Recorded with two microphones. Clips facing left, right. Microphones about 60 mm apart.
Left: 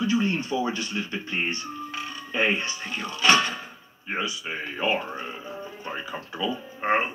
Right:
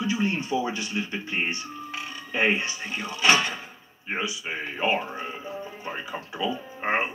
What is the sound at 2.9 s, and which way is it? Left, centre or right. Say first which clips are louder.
Speech: left 1 dB; right.